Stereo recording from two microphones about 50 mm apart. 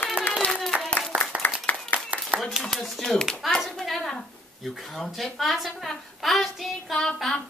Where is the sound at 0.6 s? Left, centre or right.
Centre.